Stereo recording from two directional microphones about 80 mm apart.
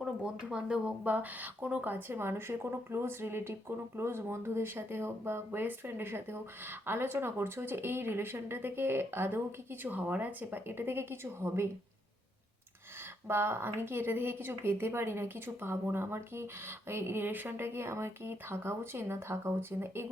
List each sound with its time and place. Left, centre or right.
0.0 s speech: centre; by 11.7 s right
13.2 s speech: right